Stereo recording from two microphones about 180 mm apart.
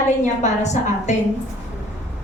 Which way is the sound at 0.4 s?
40° left (ahead or behind).